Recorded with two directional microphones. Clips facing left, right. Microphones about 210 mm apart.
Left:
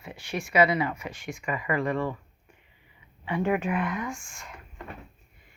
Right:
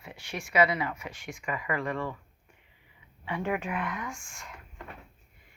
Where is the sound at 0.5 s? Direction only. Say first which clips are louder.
Left 3 dB; 25° left (ahead or behind).